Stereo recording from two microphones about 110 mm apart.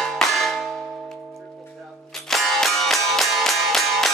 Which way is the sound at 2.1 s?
5° left (ahead or behind).